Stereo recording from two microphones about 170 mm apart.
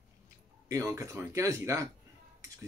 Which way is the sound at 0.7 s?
15° right (ahead or behind).